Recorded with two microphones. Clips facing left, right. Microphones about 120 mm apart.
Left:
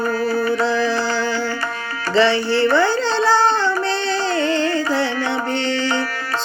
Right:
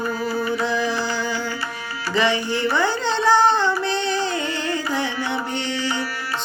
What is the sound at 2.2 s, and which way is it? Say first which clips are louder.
Music: left 5 dB; 15° right (ahead or behind).